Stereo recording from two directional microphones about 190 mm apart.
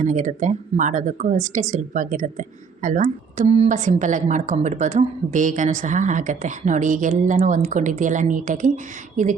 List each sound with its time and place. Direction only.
0.0 s speech: 40° right (ahead or behind)